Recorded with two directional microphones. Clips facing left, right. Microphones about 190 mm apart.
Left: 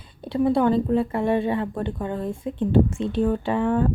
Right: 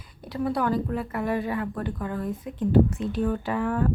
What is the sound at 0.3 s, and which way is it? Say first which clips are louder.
A woman's voice: left 6 dB; 25° left (ahead or behind).